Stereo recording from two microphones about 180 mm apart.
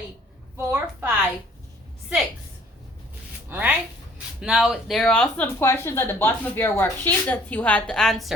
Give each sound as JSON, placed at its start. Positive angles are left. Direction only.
{"t": 0.5, "sound": "a woman's voice", "side_deg": -15}
{"t": 3.5, "sound": "a woman's voice", "side_deg": -10}